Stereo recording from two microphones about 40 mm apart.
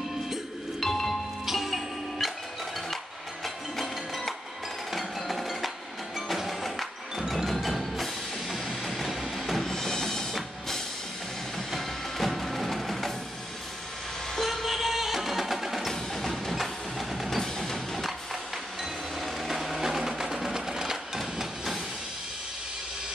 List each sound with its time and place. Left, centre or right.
0.7 s music: centre
1.4 s music: centre
3.4 s music: centre
4.9 s percussion: centre
6.2 s music: centre
7.2 s wood block: centre
9.7 s music: centre
11.5 s music: centre
14.3 s music: centre
15.9 s music: centre
17.4 s music: centre
17.9 s music: centre